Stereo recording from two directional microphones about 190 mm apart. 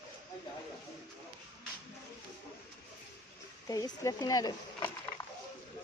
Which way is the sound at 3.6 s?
20° left (ahead or behind).